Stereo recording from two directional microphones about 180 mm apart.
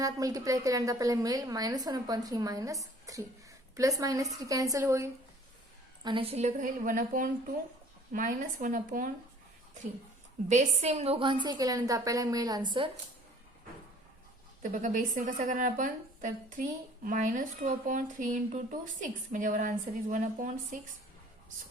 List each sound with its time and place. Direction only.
0.0 s a woman's voice: 20° right (ahead or behind)
6.1 s a woman's voice: 30° right (ahead or behind); by 9.1 s 50° right (ahead or behind)
10.5 s a woman's voice: 40° right (ahead or behind)
14.6 s a woman's voice: 45° right (ahead or behind)